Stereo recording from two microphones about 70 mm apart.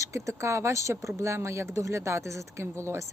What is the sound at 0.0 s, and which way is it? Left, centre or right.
Speech, right.